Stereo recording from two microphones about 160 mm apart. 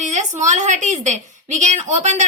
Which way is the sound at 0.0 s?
45° right (ahead or behind).